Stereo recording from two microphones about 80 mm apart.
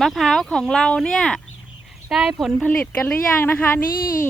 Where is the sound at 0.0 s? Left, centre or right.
Centre.